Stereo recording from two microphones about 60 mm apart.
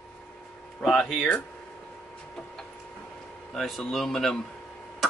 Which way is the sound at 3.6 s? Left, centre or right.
Centre.